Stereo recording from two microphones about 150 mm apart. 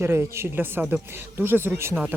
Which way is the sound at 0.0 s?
15° right (ahead or behind).